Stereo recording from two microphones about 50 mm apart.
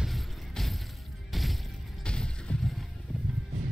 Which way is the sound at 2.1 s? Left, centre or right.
Centre.